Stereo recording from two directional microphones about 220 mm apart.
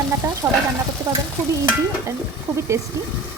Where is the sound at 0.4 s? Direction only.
10° right (ahead or behind).